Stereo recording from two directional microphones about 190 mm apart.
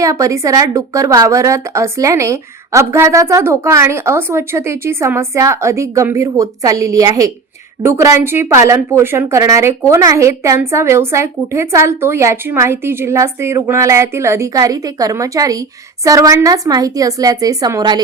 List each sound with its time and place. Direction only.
0.0 s a woman's voice: 15° right (ahead or behind)